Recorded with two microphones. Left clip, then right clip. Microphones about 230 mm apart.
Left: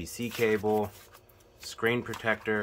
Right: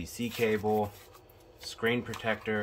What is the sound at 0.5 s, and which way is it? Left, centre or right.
Speech, left.